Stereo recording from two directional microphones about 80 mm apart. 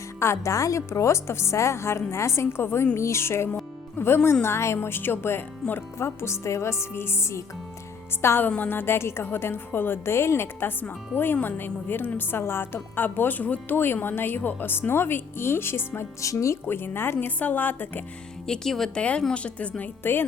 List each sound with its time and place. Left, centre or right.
0.2 s a woman's voice: left
16.2 s a woman's voice: left
16.6 s a woman's voice: left
18.4 s speech: centre
19.3 s a woman's voice: centre